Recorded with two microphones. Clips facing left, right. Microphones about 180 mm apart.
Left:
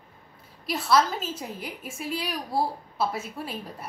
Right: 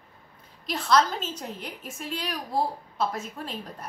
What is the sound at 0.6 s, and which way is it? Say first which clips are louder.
A woman's voice: even; 5° left (ahead or behind).